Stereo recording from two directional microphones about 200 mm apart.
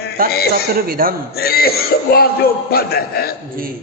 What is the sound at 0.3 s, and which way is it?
Speech, 50° left (ahead or behind).